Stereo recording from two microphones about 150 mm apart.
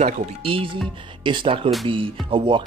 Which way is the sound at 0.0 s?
40° right (ahead or behind).